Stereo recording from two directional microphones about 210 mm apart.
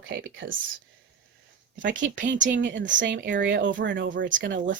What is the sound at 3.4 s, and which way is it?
Speech, 60° right (ahead or behind).